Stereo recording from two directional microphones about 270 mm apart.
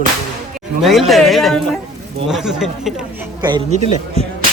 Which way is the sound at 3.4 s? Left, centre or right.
Centre.